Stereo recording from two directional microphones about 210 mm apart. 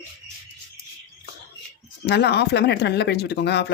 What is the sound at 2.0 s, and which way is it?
Speech, 50° left (ahead or behind).